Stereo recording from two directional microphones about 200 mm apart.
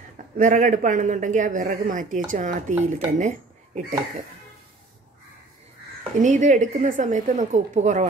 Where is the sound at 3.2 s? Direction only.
35° right (ahead or behind).